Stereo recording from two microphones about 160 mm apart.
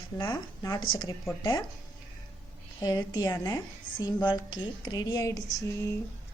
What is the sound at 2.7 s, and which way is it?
Speech, 25° left (ahead or behind).